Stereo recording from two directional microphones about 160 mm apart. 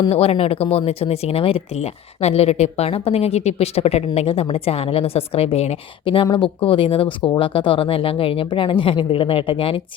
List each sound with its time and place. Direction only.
0.0 s speech: 40° left (ahead or behind)